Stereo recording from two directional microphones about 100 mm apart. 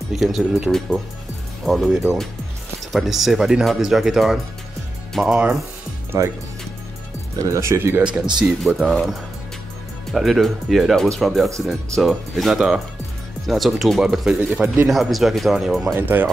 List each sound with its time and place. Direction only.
0.1 s speech: centre (ahead or behind)
6.1 s speech: 25° right (ahead or behind)
7.4 s speech: 30° right (ahead or behind)
8.4 s speech: 5° right (ahead or behind)
10.1 s speech: centre (ahead or behind); by 14.9 s 15° right (ahead or behind)
14.9 s speech: centre (ahead or behind)